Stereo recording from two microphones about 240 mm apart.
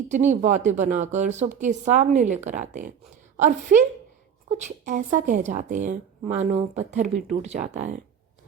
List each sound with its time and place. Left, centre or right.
0.1 s speech: right